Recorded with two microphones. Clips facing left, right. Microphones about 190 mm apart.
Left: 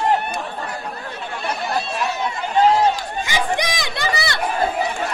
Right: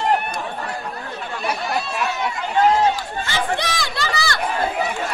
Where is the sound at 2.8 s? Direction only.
15° left (ahead or behind).